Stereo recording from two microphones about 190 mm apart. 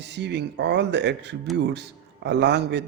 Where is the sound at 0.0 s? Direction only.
65° right (ahead or behind).